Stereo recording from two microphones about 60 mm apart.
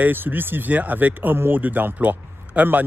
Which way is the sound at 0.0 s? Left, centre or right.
Right.